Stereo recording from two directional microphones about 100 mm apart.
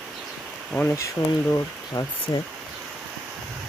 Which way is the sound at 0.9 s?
30° left (ahead or behind).